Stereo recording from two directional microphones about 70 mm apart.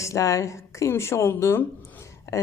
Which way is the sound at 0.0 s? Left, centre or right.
Left.